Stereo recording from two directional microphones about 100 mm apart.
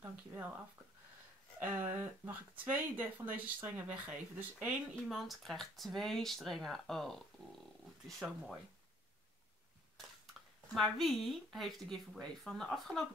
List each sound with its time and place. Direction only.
1.6 s a sound: 20° right (ahead or behind)
2.6 s speech: 20° right (ahead or behind)
5.0 s speech: centre (ahead or behind)
10.7 s speech: centre (ahead or behind)